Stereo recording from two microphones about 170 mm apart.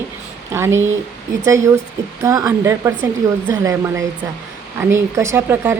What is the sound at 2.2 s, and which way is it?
A woman's voice, 20° right (ahead or behind).